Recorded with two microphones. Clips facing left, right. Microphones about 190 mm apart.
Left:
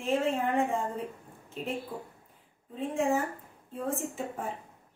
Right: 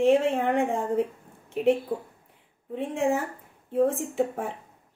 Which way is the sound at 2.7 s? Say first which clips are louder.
Right 3 dB; 75° right (ahead or behind).